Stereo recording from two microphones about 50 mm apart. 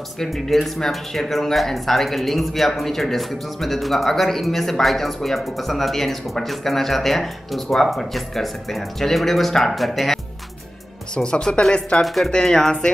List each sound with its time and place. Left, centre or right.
0.2 s speech: centre
11.1 s speech: left
12.0 s speech: centre
12.3 s speech: centre